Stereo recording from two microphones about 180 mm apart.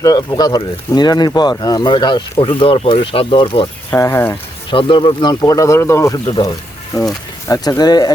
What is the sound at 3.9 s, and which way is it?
Speech, 15° left (ahead or behind).